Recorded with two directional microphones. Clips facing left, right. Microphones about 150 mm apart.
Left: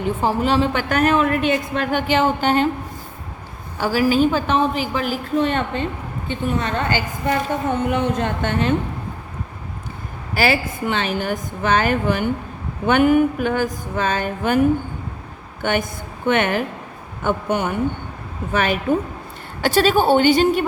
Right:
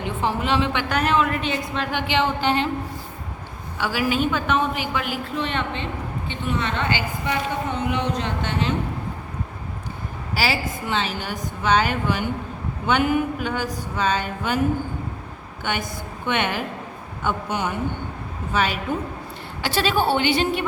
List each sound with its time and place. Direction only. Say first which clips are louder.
0.0 s a woman's voice: left 5 dB; 40° left (ahead or behind)
3.8 s a woman's voice: left 6 dB; 40° left (ahead or behind)
10.3 s a woman's voice: left 5 dB; 55° left (ahead or behind)
15.6 s a woman's voice: left 6 dB; 50° left (ahead or behind)